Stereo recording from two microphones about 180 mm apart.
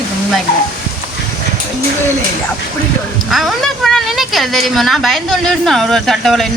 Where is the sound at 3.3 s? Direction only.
Centre (ahead or behind).